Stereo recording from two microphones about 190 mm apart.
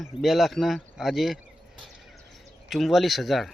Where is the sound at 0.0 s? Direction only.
Centre (ahead or behind).